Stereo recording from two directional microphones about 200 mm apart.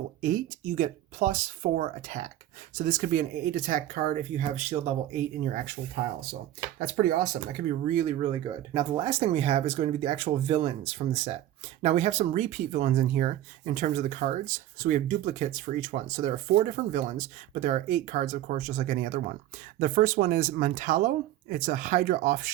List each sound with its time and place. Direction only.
0.2 s speech: 40° right (ahead or behind)
6.7 s speech: 45° right (ahead or behind)